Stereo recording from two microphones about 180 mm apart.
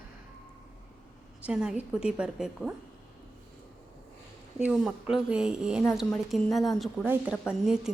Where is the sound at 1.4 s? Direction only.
5° right (ahead or behind).